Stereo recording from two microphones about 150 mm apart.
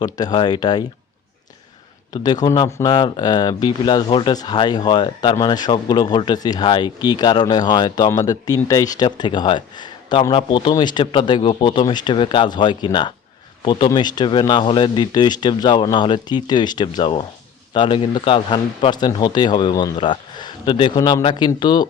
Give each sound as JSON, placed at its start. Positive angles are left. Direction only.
{"t": 0.0, "sound": "speech", "side_deg": 25}
{"t": 2.2, "sound": "speech", "side_deg": 25}